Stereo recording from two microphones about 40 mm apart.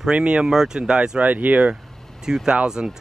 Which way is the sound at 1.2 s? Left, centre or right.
Right.